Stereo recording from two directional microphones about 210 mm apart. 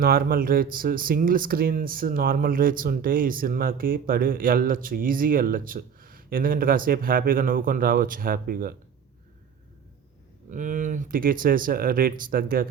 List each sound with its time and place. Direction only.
0.0 s speech: 45° right (ahead or behind)
10.5 s speech: 40° right (ahead or behind)